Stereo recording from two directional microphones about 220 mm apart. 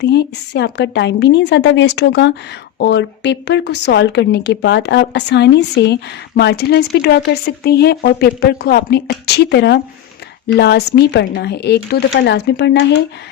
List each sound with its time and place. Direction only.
0.0 s speech: 50° left (ahead or behind)